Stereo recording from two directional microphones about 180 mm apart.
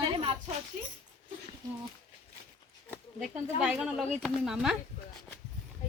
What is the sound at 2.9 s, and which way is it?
Speech, 5° right (ahead or behind).